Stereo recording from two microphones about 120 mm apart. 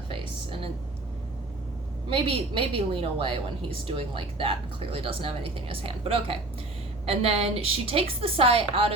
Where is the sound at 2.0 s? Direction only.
50° right (ahead or behind).